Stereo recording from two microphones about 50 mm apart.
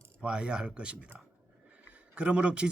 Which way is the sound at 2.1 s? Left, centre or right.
Right.